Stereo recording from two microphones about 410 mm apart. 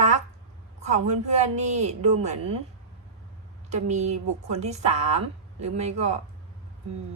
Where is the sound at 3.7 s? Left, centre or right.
Centre.